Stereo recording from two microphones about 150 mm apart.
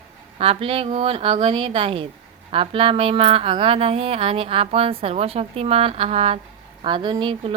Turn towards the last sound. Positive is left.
turn(degrees=-30)  # may be behind; listen again after turning